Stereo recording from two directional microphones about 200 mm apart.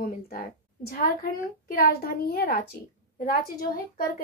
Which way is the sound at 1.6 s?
45° left (ahead or behind).